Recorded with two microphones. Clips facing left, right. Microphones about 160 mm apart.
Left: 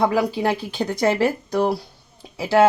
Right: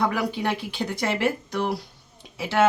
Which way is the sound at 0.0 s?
30° left (ahead or behind).